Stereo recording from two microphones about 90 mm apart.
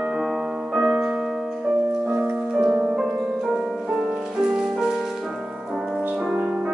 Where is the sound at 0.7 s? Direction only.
5° right (ahead or behind).